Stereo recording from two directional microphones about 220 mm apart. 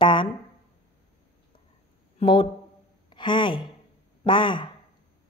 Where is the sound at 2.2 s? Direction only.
25° left (ahead or behind).